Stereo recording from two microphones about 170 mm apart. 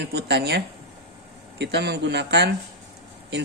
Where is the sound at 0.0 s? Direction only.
75° right (ahead or behind).